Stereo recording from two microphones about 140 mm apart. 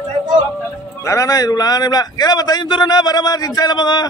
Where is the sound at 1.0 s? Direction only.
20° left (ahead or behind).